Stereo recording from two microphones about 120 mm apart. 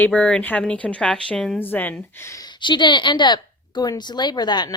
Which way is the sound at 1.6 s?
15° left (ahead or behind).